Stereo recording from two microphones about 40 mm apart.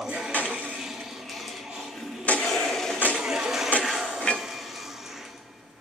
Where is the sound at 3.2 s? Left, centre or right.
Centre.